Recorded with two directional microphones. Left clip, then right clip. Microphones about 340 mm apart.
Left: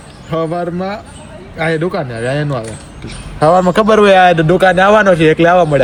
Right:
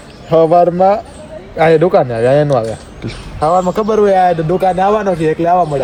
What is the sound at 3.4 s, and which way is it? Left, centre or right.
Speech, left.